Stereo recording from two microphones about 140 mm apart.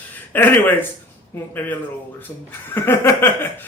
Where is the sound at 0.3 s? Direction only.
15° left (ahead or behind).